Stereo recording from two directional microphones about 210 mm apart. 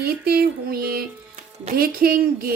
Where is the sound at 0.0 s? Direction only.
45° right (ahead or behind).